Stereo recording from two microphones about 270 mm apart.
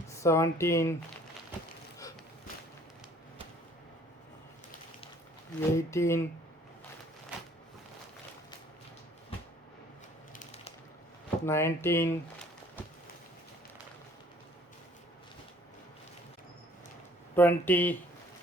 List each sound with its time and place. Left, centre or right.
0.1 s speech: centre
5.5 s speech: centre
10.3 s a sound: left
11.4 s speech: centre
17.3 s speech: centre